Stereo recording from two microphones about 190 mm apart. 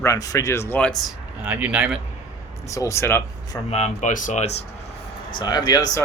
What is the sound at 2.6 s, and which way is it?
Speech, 15° left (ahead or behind).